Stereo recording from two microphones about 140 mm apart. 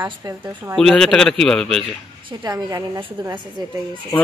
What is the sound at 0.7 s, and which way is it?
A man's voice, 5° left (ahead or behind).